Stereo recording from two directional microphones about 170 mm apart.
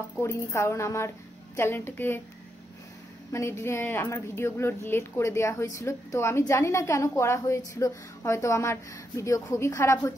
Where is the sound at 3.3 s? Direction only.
15° left (ahead or behind).